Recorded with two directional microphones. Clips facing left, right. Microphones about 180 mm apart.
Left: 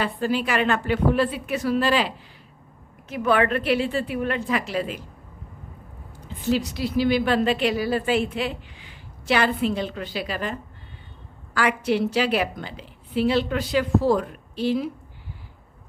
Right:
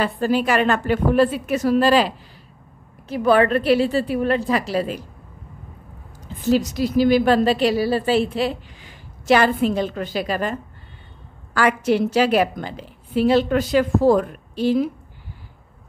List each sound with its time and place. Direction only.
0.0 s a woman's voice: 45° right (ahead or behind)
6.2 s a woman's voice: 45° right (ahead or behind)
11.5 s a woman's voice: 45° right (ahead or behind)